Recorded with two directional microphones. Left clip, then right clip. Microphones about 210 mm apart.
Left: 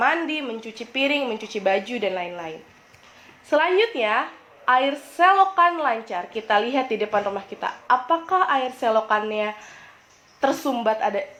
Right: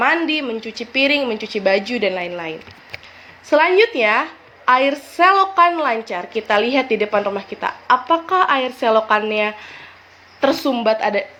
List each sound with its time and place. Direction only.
0.0 s a woman's voice: 30° right (ahead or behind)